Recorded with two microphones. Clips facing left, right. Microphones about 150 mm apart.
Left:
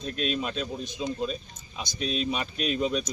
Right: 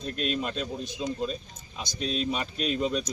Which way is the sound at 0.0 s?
Centre (ahead or behind).